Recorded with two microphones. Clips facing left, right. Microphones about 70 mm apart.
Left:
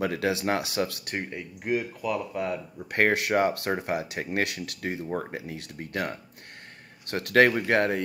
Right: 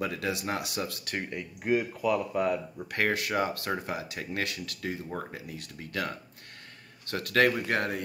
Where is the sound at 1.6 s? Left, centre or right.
Centre.